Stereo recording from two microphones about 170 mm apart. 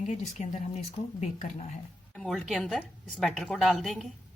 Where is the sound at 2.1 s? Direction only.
5° left (ahead or behind).